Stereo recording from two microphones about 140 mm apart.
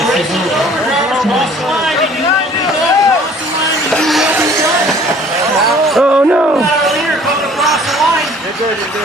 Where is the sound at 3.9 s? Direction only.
Centre (ahead or behind).